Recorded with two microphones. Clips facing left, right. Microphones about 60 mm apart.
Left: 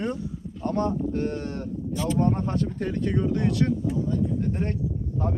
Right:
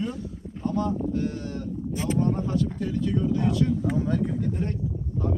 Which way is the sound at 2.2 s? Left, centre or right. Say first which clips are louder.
Left 1 dB; left.